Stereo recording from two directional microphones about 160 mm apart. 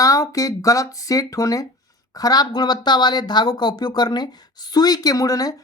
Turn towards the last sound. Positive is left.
turn(degrees=20)  # may be behind; listen again after turning